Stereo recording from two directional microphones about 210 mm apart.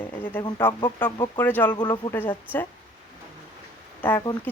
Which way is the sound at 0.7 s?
20° left (ahead or behind).